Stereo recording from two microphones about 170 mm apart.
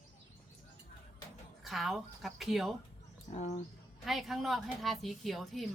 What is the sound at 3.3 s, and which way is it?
Speech, 40° left (ahead or behind).